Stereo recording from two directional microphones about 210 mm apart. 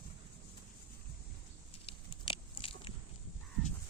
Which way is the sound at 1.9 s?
25° left (ahead or behind).